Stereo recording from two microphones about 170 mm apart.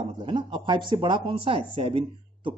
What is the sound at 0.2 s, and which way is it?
A man's voice, 30° right (ahead or behind).